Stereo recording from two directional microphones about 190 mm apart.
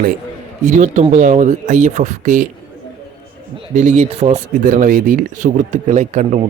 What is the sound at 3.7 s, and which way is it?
Speech, 40° right (ahead or behind).